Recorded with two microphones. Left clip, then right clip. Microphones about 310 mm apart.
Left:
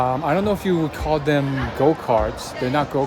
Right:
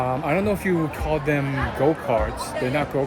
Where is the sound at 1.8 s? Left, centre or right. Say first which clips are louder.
Left 3 dB; centre.